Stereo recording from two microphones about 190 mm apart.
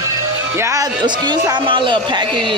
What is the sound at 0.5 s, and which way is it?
Speech, 15° right (ahead or behind).